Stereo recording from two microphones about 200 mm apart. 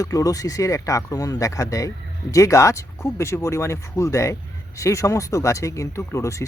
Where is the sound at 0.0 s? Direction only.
15° left (ahead or behind).